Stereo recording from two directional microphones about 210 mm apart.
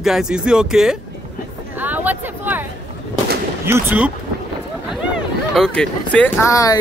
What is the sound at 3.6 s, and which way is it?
Speech, 10° right (ahead or behind).